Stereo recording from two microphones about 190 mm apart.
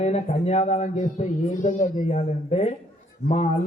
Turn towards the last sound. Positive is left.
turn(degrees=35)  # may be behind; listen again after turning